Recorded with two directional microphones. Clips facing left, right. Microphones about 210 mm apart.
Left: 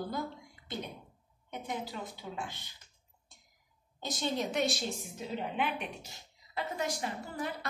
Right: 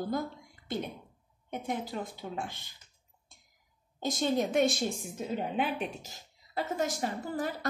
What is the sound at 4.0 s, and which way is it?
Speech, 50° right (ahead or behind).